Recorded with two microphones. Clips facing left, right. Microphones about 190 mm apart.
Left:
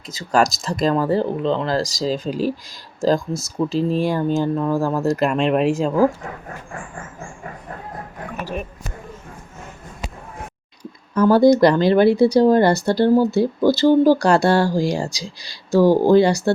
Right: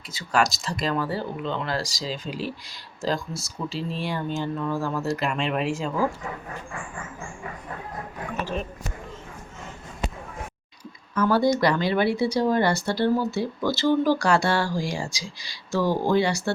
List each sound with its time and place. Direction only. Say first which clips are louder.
0.1 s speech: left 5 dB; 40° left (ahead or behind)
11.1 s speech: left 8 dB; 40° left (ahead or behind)
15.1 s speech: left 4 dB; 10° right (ahead or behind)
15.7 s speech: left 9 dB; 40° left (ahead or behind)